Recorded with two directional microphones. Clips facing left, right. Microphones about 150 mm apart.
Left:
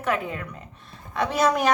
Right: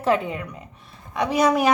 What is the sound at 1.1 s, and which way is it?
Speech, 10° right (ahead or behind).